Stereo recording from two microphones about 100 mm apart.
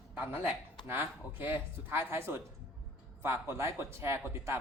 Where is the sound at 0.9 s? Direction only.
20° right (ahead or behind).